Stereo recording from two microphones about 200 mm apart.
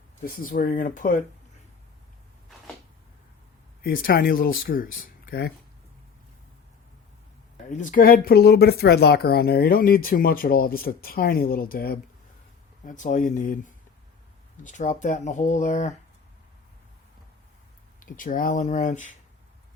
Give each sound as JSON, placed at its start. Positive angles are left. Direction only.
{"t": 0.3, "sound": "speech", "side_deg": 45}
{"t": 3.8, "sound": "speech", "side_deg": 45}
{"t": 7.7, "sound": "speech", "side_deg": 40}
{"t": 12.8, "sound": "speech", "side_deg": 40}
{"t": 18.0, "sound": "speech", "side_deg": 45}